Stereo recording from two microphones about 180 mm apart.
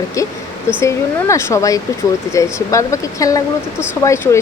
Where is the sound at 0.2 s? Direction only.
20° left (ahead or behind).